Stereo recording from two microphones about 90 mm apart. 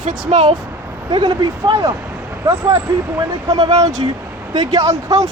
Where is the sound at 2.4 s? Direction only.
35° right (ahead or behind).